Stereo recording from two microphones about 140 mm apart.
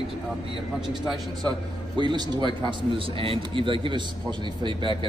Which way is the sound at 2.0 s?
35° right (ahead or behind).